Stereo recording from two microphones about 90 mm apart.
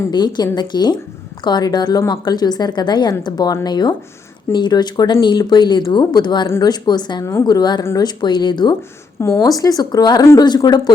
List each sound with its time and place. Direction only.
0.1 s a woman's voice: 55° left (ahead or behind)
9.4 s a woman's voice: 45° left (ahead or behind)